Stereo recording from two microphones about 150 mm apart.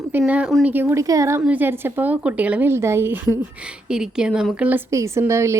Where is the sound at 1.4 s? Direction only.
10° right (ahead or behind).